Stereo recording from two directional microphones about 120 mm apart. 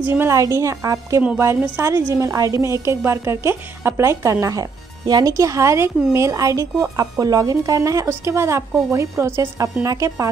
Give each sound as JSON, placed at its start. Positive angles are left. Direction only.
{"t": 0.0, "sound": "a woman's voice", "side_deg": -20}